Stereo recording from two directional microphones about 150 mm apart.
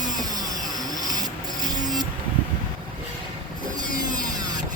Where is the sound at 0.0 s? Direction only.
25° right (ahead or behind).